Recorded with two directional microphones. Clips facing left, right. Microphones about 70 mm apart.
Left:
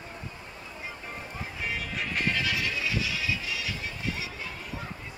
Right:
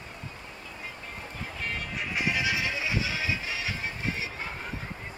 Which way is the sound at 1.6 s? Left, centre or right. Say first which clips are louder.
Left 1 dB; centre.